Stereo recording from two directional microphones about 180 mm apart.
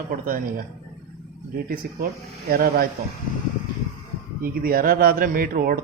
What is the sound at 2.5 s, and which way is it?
Speech, 55° right (ahead or behind).